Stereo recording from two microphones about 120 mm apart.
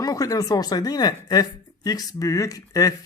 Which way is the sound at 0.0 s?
30° left (ahead or behind).